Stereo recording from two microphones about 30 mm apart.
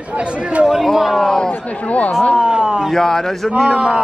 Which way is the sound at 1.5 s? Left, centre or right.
Left.